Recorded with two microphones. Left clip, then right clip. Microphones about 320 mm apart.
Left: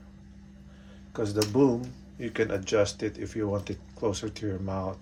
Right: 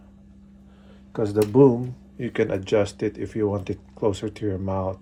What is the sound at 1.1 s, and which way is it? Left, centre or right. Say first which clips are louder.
Speech: right 6 dB; right.